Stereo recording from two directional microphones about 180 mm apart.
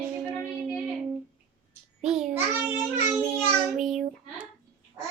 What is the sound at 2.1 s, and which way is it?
Child singing, centre (ahead or behind).